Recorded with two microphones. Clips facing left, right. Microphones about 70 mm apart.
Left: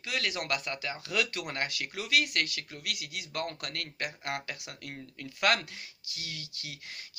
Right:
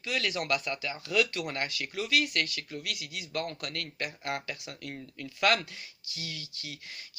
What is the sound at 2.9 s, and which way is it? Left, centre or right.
Speech, left.